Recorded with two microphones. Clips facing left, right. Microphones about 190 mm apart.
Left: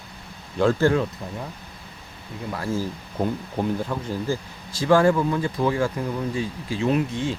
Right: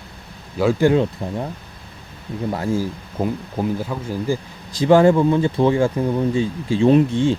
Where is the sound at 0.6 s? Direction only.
10° right (ahead or behind).